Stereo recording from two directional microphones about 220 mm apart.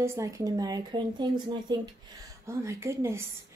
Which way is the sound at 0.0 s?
15° right (ahead or behind).